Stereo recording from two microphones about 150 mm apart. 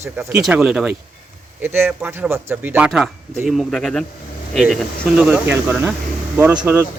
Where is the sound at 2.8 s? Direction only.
5° right (ahead or behind).